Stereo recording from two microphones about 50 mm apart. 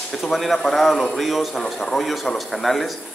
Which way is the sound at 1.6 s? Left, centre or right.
Centre.